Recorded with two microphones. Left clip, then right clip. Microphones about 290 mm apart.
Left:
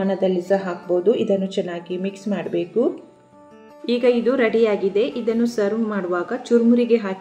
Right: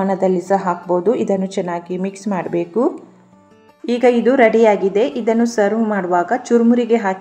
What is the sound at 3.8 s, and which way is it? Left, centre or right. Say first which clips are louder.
A woman's voice: right 4 dB; centre.